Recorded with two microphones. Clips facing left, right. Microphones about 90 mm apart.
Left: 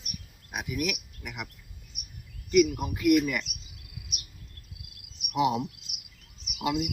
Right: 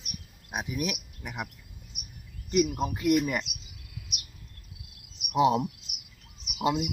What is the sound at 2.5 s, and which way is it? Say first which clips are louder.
Speech: left 3 dB; 30° right (ahead or behind).